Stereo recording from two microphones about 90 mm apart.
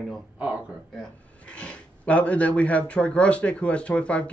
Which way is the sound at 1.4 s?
15° left (ahead or behind).